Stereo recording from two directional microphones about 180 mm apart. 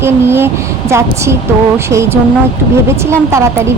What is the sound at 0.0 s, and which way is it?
Speech, 15° right (ahead or behind).